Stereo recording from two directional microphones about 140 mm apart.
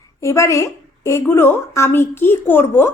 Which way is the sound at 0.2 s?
20° left (ahead or behind).